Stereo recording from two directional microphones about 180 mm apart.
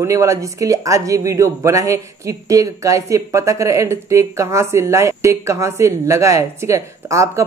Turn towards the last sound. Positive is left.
turn(degrees=-15)  # may be behind; listen again after turning